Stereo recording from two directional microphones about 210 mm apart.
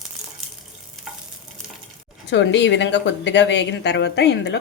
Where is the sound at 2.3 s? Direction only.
60° left (ahead or behind).